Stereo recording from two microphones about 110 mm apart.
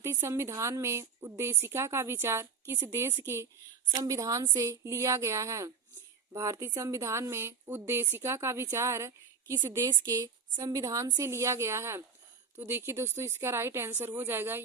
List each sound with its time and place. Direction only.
0.0 s a woman's voice: 25° right (ahead or behind)
9.9 s a woman's voice: 40° right (ahead or behind); by 14.6 s 20° right (ahead or behind)